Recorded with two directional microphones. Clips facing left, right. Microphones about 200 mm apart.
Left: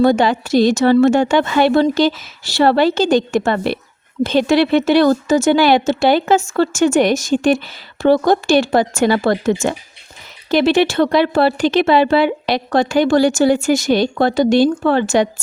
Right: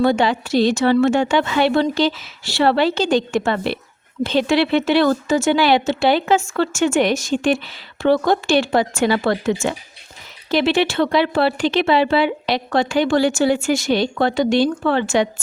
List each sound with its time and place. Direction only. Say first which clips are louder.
0.0 s speech: left 3 dB; 45° left (ahead or behind)